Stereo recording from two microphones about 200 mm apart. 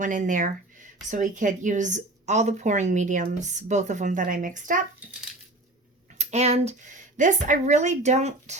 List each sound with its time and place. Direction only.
0.0 s speech: 40° right (ahead or behind)
6.1 s speech: 35° right (ahead or behind)